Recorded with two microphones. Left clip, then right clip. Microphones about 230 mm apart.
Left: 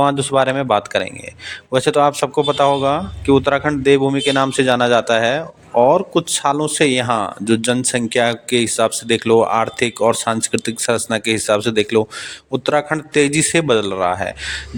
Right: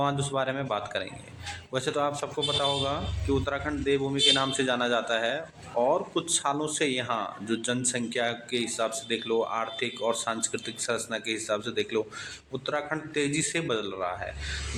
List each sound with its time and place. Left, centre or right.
0.0 s a man's voice: left